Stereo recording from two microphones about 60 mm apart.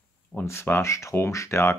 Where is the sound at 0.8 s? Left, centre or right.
Left.